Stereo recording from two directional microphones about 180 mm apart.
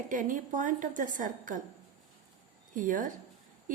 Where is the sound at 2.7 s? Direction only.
45° right (ahead or behind).